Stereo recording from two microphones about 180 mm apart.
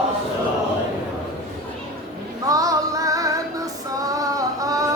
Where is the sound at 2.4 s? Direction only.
20° right (ahead or behind).